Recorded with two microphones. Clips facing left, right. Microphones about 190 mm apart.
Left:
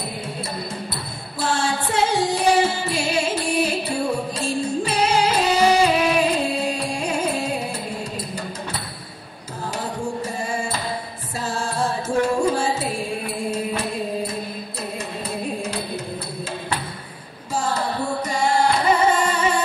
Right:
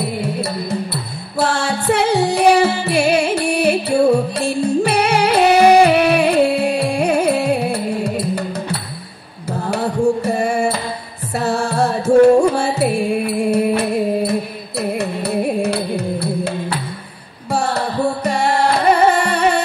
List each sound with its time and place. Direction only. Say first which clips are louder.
0.2 s music: right 8 dB; 70° right (ahead or behind)